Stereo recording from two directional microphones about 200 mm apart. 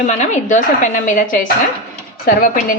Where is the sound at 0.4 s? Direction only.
40° left (ahead or behind).